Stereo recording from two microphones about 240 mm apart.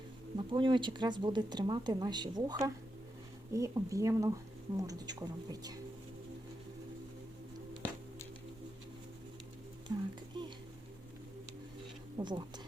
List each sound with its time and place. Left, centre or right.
0.3 s speech: centre
10.3 s speech: centre
12.2 s speech: right